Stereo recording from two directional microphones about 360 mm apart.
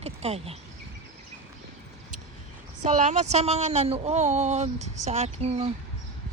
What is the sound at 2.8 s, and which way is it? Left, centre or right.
Speech, centre.